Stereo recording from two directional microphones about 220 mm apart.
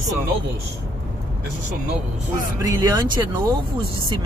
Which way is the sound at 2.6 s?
20° right (ahead or behind).